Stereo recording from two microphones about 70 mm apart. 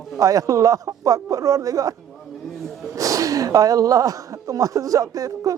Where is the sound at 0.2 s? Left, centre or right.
Right.